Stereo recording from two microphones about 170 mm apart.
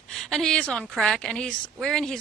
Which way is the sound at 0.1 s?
Centre (ahead or behind).